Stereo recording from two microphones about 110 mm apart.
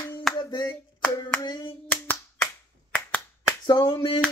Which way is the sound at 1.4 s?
40° left (ahead or behind).